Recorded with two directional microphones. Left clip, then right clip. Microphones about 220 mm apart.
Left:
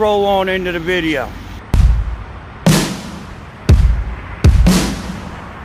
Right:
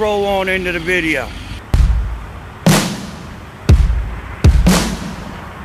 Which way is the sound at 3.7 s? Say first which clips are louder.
Even; centre (ahead or behind).